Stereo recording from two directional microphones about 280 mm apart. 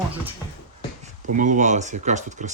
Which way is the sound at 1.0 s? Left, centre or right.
Right.